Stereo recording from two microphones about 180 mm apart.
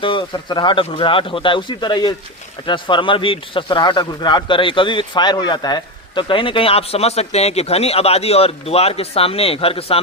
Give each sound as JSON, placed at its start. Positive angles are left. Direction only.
{"t": 0.0, "sound": "speech", "side_deg": 25}